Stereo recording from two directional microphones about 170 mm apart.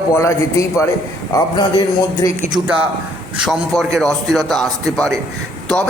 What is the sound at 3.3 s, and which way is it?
A man's voice, centre (ahead or behind).